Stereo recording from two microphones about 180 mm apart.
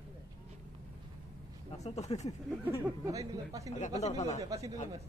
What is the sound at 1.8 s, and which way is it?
Speech, 35° left (ahead or behind).